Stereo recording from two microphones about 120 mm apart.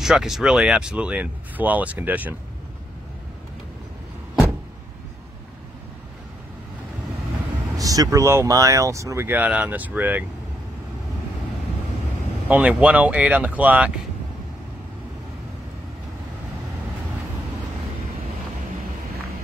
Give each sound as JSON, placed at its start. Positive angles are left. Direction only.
{"t": 0.0, "sound": "speech", "side_deg": -5}
{"t": 7.7, "sound": "speech", "side_deg": -30}
{"t": 9.4, "sound": "speech", "side_deg": -10}
{"t": 12.4, "sound": "speech", "side_deg": -10}